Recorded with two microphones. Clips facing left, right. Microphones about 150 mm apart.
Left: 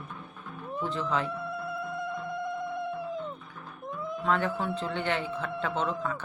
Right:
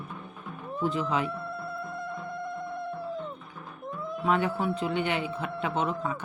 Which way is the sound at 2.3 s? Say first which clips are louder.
Left 2 dB; 20° left (ahead or behind).